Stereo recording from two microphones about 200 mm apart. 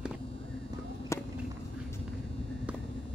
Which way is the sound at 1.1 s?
15° left (ahead or behind).